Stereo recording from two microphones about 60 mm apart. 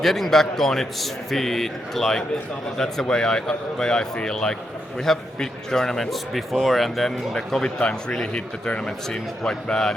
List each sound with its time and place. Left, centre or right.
0.0 s a man's voice: centre
9.0 s speech: centre